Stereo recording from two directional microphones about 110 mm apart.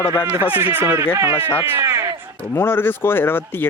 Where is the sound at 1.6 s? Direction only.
25° right (ahead or behind).